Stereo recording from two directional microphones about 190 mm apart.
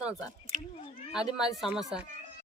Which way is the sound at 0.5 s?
45° right (ahead or behind).